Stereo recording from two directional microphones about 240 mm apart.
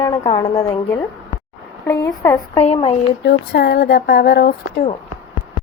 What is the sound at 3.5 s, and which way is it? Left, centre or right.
Speech, left.